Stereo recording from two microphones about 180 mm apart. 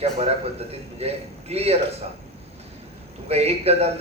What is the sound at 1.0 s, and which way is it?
Speech, 35° right (ahead or behind).